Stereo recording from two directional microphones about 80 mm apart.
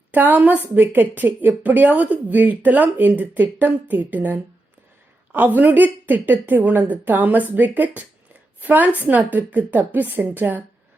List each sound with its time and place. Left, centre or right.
0.1 s a woman's voice: right